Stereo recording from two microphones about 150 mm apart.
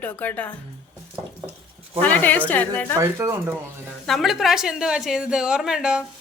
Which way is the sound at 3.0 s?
20° right (ahead or behind).